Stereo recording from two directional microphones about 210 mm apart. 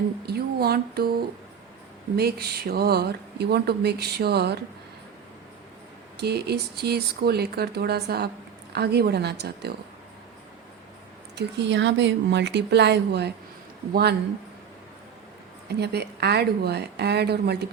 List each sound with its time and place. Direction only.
0.3 s speech: 50° right (ahead or behind)
2.1 s speech: 50° right (ahead or behind)
6.1 s speech: 50° right (ahead or behind)
11.3 s speech: 55° right (ahead or behind)
15.8 s speech: 50° right (ahead or behind)